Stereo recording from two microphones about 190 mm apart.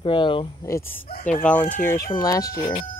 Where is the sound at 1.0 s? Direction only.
45° left (ahead or behind).